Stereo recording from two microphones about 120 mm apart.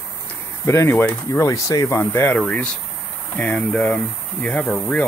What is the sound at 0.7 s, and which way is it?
Speech, 20° left (ahead or behind).